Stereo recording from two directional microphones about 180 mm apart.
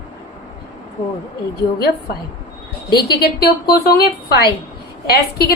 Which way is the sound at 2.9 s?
60° left (ahead or behind).